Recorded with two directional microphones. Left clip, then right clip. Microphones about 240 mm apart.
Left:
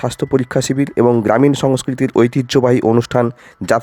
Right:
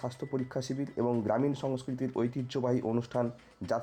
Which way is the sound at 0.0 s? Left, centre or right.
Left.